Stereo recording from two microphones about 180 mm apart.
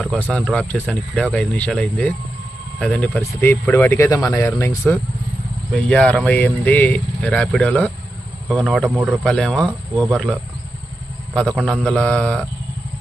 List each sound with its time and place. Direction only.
0.0 s speech: 5° left (ahead or behind)
5.7 s speech: 5° left (ahead or behind)
11.3 s speech: 5° left (ahead or behind)